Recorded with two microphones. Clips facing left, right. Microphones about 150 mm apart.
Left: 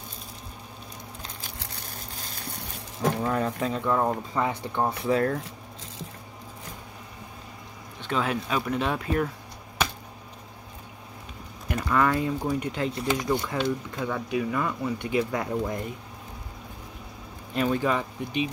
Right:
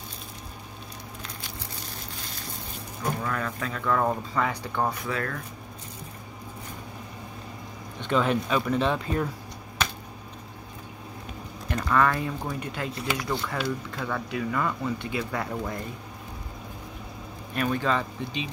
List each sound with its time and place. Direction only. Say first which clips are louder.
3.2 s speech: left 4 dB; 30° left (ahead or behind)
8.0 s speech: right 3 dB; 5° left (ahead or behind)
11.7 s speech: even; 15° left (ahead or behind)
17.6 s speech: left 1 dB; 20° left (ahead or behind)